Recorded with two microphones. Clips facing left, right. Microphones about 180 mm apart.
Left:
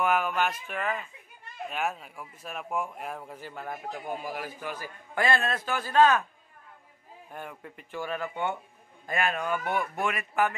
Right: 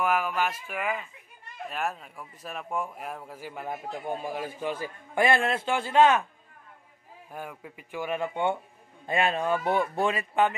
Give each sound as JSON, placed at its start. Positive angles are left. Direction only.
{"t": 0.0, "sound": "a man's voice", "side_deg": -5}
{"t": 7.2, "sound": "speech", "side_deg": -5}
{"t": 8.0, "sound": "a man's voice", "side_deg": -20}